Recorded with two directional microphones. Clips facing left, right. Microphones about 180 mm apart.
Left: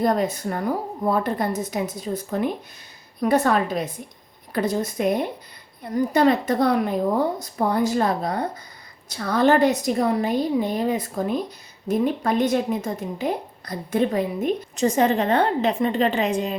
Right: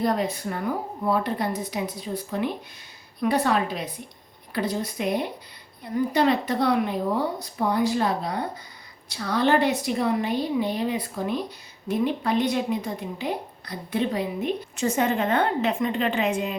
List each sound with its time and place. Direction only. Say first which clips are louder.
0.0 s a woman's voice: left 3 dB; 45° left (ahead or behind)